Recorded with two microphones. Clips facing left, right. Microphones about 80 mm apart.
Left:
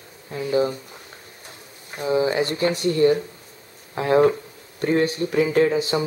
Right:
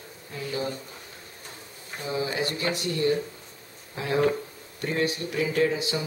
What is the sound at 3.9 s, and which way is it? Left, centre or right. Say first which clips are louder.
Speech: left 9 dB; left.